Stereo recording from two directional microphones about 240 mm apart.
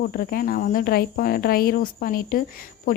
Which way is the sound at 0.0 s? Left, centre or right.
Left.